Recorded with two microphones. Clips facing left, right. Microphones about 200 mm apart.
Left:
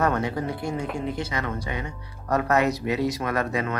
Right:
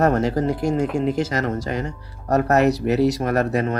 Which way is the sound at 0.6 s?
90° right.